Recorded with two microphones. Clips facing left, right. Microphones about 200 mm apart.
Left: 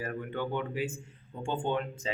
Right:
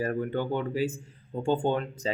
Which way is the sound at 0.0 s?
35° right (ahead or behind).